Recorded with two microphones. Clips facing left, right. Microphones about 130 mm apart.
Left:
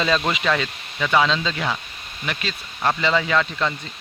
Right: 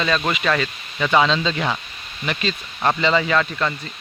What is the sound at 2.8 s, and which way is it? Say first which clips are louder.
Speech: right 2 dB; 15° right (ahead or behind).